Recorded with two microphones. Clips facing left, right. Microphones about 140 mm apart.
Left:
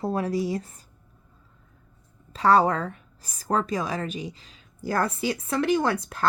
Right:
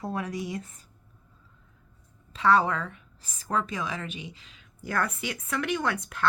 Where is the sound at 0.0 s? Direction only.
30° left (ahead or behind).